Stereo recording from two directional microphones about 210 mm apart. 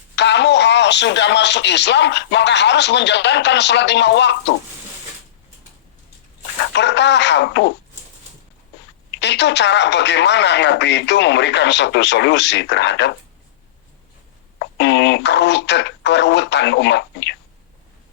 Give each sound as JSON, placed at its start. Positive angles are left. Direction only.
{"t": 0.2, "sound": "speech", "side_deg": 55}
{"t": 6.7, "sound": "speech", "side_deg": 55}
{"t": 9.1, "sound": "speech", "side_deg": 55}
{"t": 14.8, "sound": "speech", "side_deg": 55}